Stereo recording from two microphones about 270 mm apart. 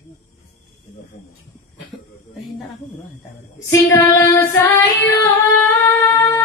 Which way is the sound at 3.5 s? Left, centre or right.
Centre.